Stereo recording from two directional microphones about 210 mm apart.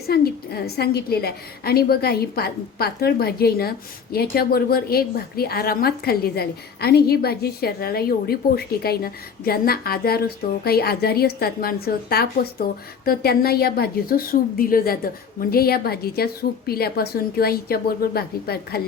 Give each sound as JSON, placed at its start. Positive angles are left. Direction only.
{"t": 0.1, "sound": "a woman's voice", "side_deg": 50}